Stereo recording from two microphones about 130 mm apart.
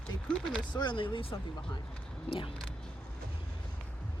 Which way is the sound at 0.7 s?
35° left (ahead or behind).